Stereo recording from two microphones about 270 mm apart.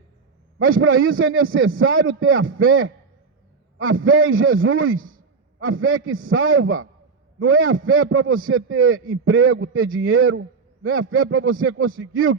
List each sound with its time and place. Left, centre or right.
0.6 s a man's voice: right
4.9 s a man's voice: right
5.5 s a man's voice: right